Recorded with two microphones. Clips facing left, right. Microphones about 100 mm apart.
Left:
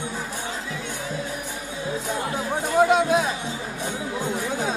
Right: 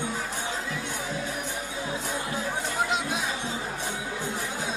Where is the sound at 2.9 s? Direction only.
55° left (ahead or behind).